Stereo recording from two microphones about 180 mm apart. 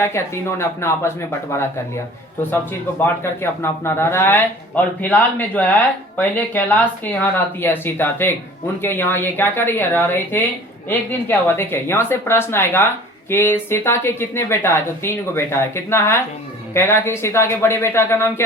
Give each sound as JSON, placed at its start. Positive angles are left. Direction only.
{"t": 0.6, "sound": "speech", "side_deg": 15}
{"t": 3.0, "sound": "speech", "side_deg": 15}